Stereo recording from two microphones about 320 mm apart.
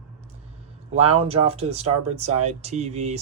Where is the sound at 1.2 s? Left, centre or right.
Centre.